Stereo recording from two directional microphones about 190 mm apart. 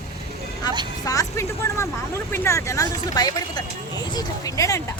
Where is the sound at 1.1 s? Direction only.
15° left (ahead or behind).